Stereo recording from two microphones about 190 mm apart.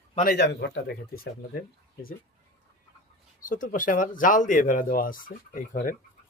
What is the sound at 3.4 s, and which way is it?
Speech, 45° left (ahead or behind).